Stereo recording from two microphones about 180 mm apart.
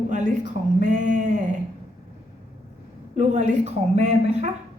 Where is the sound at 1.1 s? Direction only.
45° right (ahead or behind).